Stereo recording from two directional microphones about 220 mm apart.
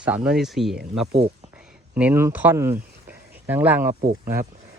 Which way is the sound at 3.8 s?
40° right (ahead or behind).